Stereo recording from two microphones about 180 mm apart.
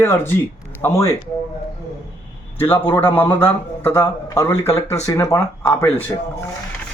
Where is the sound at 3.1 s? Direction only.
10° left (ahead or behind).